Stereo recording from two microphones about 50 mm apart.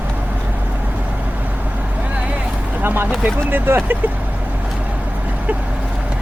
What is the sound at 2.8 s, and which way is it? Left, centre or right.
Speech, right.